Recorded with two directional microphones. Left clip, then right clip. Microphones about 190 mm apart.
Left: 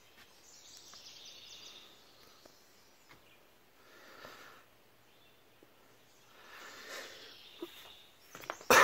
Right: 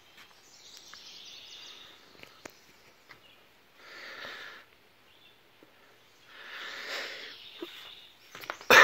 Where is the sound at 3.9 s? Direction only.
10° right (ahead or behind).